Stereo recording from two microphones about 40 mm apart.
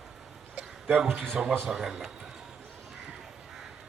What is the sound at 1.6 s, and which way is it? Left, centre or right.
Speech, centre.